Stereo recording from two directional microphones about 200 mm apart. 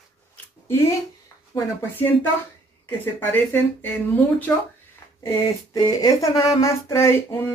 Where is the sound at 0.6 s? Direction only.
15° left (ahead or behind).